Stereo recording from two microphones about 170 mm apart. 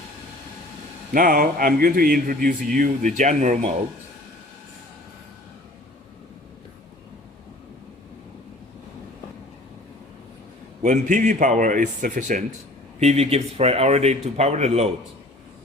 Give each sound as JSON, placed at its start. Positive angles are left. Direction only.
{"t": 1.1, "sound": "speech", "side_deg": -55}
{"t": 10.8, "sound": "a man's voice", "side_deg": -45}
{"t": 13.0, "sound": "a man's voice", "side_deg": -40}